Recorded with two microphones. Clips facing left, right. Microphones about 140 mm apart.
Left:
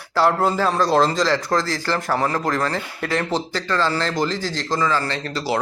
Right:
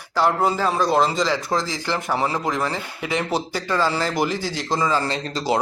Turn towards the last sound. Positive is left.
turn(degrees=-20)  # may be behind; listen again after turning